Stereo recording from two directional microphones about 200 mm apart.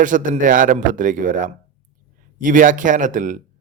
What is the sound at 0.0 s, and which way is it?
A man's voice, 40° right (ahead or behind).